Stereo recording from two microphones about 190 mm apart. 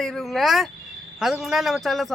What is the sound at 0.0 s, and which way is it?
A man's voice, centre (ahead or behind).